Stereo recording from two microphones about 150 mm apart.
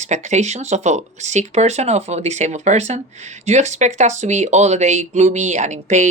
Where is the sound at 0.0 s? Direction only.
50° right (ahead or behind).